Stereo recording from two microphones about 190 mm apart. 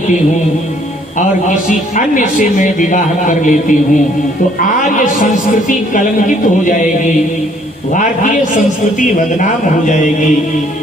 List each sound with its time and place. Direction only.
2.0 s a man's voice: 45° left (ahead or behind)
4.8 s a sound: 45° left (ahead or behind)
5.6 s a man's voice: 45° left (ahead or behind)